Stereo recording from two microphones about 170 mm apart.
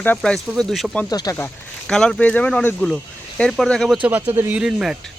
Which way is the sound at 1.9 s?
5° left (ahead or behind).